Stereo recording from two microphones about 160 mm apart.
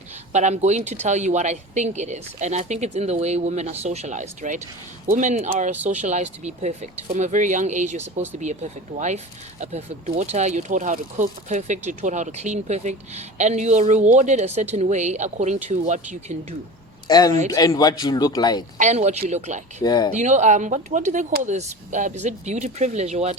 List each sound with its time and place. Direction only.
0.3 s speech: 45° right (ahead or behind)
17.1 s a man's voice: 25° left (ahead or behind)
18.8 s speech: 45° right (ahead or behind)
19.8 s a man's voice: 25° left (ahead or behind)
20.1 s speech: 45° right (ahead or behind)